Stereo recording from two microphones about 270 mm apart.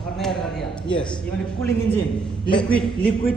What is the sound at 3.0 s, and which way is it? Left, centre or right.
Speech, left.